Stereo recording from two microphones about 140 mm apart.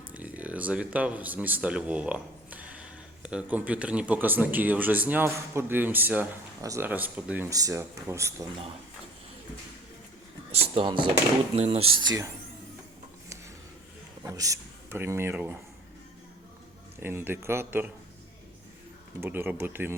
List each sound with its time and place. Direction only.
0.1 s speech: 10° right (ahead or behind)
6.6 s speech: 25° right (ahead or behind)
6.8 s speech: 10° right (ahead or behind)
7.5 s speech: 25° right (ahead or behind)
10.5 s speech: 45° right (ahead or behind)
11.5 s speech: 45° right (ahead or behind); by 12.3 s 25° right (ahead or behind)
14.3 s speech: 25° right (ahead or behind)
17.0 s speech: 15° right (ahead or behind)
19.2 s speech: 15° right (ahead or behind)